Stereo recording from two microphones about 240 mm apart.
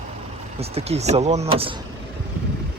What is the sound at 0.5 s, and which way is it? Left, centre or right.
Speech, right.